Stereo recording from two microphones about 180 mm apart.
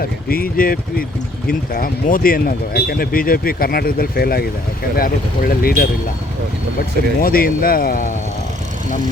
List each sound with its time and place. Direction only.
0.0 s speech: 55° left (ahead or behind)
7.2 s speech: 55° left (ahead or behind)